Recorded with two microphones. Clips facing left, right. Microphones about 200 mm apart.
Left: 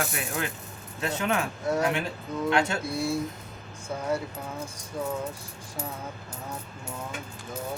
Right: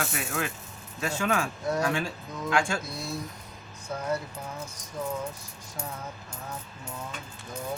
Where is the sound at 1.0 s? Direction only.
25° left (ahead or behind).